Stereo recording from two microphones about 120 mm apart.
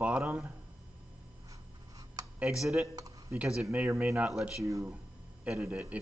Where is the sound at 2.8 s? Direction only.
25° right (ahead or behind).